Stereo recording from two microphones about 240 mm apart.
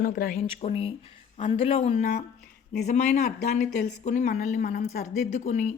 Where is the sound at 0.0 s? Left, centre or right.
Left.